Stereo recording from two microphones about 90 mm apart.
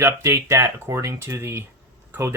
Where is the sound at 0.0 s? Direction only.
30° right (ahead or behind).